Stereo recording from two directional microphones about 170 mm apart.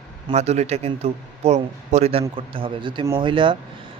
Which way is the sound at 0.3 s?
40° right (ahead or behind).